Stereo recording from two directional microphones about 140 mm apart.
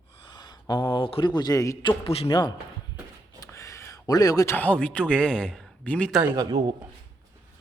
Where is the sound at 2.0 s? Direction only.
45° left (ahead or behind).